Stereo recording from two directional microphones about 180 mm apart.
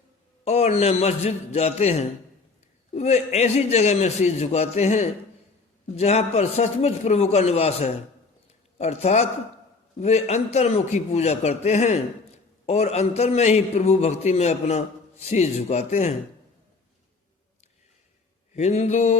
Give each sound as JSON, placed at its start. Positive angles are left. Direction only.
{"t": 0.4, "sound": "a man's voice", "side_deg": 35}
{"t": 18.5, "sound": "a man's voice", "side_deg": 40}